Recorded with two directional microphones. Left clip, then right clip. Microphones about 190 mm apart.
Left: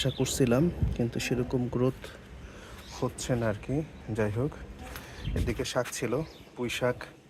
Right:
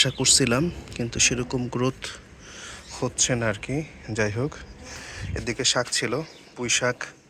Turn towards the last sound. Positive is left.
turn(degrees=5)  # may be behind; listen again after turning